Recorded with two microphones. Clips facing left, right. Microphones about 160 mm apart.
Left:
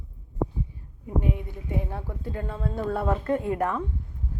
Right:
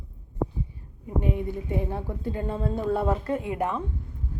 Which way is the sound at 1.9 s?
15° right (ahead or behind).